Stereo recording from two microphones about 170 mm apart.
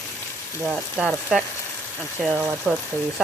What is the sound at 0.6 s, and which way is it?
Speech, centre (ahead or behind).